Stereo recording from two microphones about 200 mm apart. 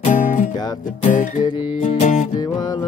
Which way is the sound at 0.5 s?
20° left (ahead or behind).